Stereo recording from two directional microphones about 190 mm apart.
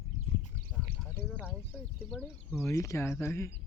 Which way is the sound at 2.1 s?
10° left (ahead or behind).